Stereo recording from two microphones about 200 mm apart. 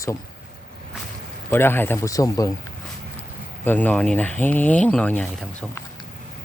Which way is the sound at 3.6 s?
10° left (ahead or behind).